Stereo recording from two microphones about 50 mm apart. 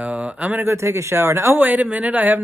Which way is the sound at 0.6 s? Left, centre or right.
Right.